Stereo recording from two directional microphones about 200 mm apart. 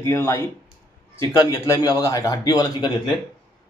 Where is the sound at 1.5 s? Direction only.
15° left (ahead or behind).